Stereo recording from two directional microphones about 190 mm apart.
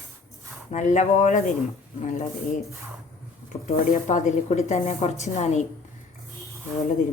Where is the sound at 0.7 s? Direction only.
40° left (ahead or behind).